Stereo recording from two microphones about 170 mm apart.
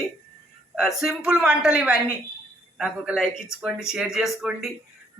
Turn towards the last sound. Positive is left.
turn(degrees=-5)  # may be behind; listen again after turning